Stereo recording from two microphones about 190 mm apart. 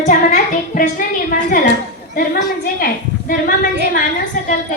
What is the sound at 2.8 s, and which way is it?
Speech, 50° left (ahead or behind).